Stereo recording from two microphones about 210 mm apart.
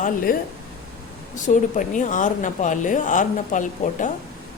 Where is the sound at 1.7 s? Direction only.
35° left (ahead or behind).